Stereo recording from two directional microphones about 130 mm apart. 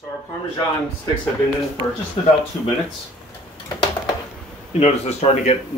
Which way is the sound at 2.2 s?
50° left (ahead or behind).